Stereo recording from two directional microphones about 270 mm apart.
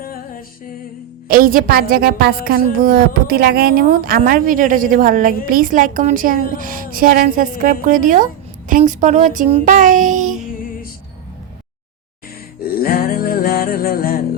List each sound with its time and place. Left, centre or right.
1.3 s a woman's voice: right
12.5 s music: left